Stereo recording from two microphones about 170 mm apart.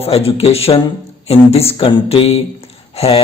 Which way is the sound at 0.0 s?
35° left (ahead or behind).